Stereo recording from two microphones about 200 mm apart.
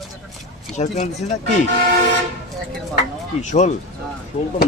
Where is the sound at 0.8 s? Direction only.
35° left (ahead or behind).